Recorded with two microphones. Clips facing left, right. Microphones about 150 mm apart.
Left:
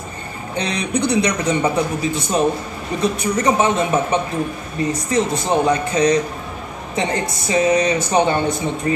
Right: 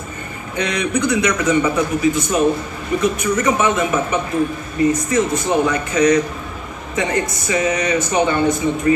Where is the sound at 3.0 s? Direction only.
35° left (ahead or behind).